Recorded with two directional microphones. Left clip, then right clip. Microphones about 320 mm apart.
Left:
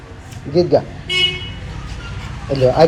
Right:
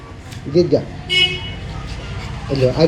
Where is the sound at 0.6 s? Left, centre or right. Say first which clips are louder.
Left 1 dB; centre.